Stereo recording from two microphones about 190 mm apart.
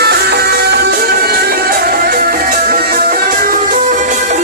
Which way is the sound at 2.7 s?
50° right (ahead or behind).